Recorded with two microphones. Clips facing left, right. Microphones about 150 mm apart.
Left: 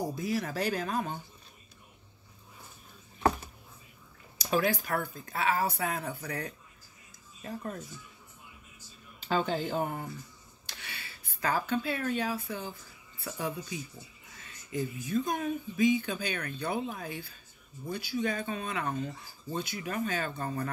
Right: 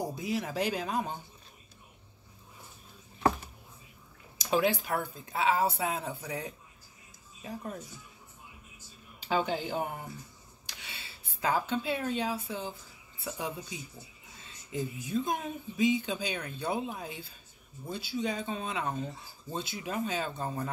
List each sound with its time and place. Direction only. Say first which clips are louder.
0.1 s speech: left 1 dB; 20° right (ahead or behind)
4.4 s speech: right 1 dB; 20° right (ahead or behind)
9.2 s speech: left 1 dB; 10° right (ahead or behind)
10.8 s speech: left 2 dB; 25° right (ahead or behind)